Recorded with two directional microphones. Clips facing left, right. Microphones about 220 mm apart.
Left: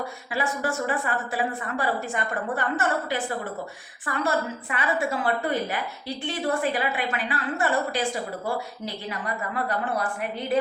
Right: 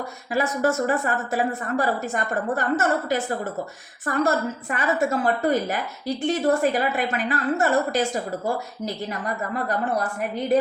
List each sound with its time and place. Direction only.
0.3 s a woman's voice: 45° right (ahead or behind)